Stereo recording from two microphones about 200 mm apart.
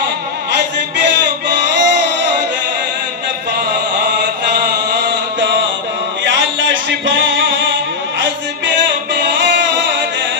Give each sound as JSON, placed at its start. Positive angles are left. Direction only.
{"t": 0.9, "sound": "male singing", "side_deg": -60}
{"t": 4.2, "sound": "chant", "side_deg": -60}
{"t": 6.2, "sound": "a sound", "side_deg": -70}
{"t": 7.2, "sound": "music", "side_deg": -65}
{"t": 9.2, "sound": "music", "side_deg": -60}